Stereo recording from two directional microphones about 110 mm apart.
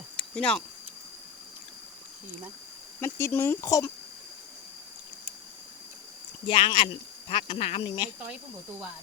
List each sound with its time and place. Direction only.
0.2 s a sound: 10° left (ahead or behind)
3.0 s speech: 25° left (ahead or behind)
6.5 s speech: 50° left (ahead or behind)